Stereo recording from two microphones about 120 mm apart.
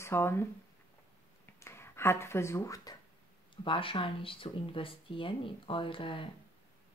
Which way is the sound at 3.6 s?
45° left (ahead or behind).